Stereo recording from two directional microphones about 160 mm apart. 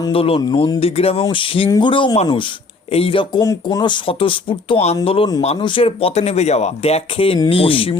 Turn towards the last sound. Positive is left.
turn(degrees=35)  # may be behind; listen again after turning